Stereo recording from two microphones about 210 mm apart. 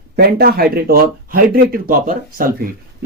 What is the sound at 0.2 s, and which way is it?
Speech, 45° right (ahead or behind).